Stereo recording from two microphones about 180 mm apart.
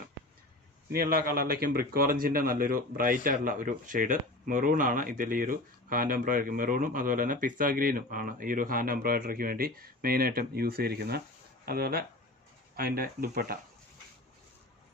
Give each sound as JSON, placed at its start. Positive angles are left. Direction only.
{"t": 0.9, "sound": "speech", "side_deg": -55}